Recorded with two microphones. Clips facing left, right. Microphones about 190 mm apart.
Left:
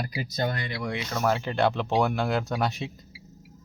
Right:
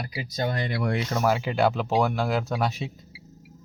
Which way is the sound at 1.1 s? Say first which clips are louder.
Even; 10° right (ahead or behind).